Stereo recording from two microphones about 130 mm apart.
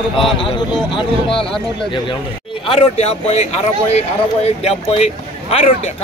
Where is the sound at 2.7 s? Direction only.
55° left (ahead or behind).